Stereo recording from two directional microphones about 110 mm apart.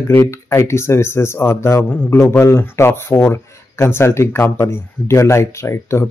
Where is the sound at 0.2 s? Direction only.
25° left (ahead or behind).